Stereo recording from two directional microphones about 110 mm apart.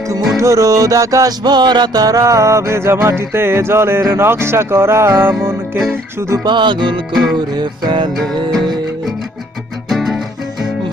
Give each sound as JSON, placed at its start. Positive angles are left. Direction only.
{"t": 0.3, "sound": "music", "side_deg": -30}
{"t": 6.4, "sound": "music", "side_deg": -45}
{"t": 7.1, "sound": "music", "side_deg": 0}
{"t": 7.3, "sound": "music", "side_deg": -40}
{"t": 9.9, "sound": "music", "side_deg": 0}